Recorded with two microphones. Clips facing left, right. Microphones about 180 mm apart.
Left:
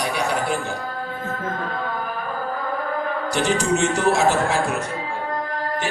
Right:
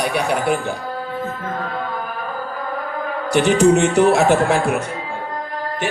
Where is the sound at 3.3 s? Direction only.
60° right (ahead or behind).